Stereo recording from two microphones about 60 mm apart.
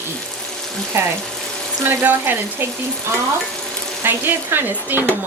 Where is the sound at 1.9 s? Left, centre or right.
Right.